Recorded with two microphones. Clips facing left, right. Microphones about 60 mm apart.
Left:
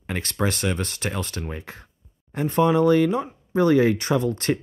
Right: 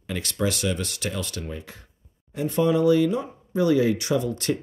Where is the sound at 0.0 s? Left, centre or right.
Left.